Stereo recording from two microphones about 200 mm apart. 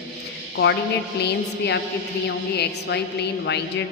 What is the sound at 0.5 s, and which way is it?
A woman's voice, 60° left (ahead or behind).